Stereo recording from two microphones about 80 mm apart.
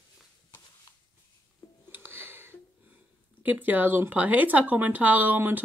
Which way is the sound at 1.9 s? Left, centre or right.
Right.